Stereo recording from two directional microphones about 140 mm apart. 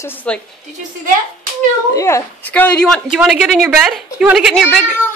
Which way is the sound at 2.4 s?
10° left (ahead or behind).